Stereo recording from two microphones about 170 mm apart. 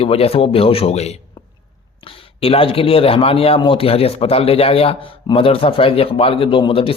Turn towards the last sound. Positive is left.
turn(degrees=35)  # may be behind; listen again after turning